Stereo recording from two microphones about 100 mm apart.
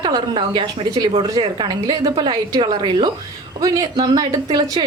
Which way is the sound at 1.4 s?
45° right (ahead or behind).